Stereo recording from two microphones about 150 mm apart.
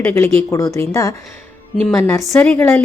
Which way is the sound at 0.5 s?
20° left (ahead or behind).